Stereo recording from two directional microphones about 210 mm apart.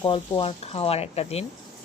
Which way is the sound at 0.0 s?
25° left (ahead or behind).